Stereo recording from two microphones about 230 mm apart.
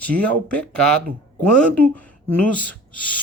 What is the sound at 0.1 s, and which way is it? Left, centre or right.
Speech, centre.